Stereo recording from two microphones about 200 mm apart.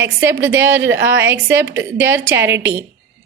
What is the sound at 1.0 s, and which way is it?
Speech, 65° right (ahead or behind).